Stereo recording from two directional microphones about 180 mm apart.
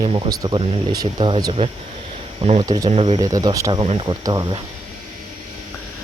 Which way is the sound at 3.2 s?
20° right (ahead or behind).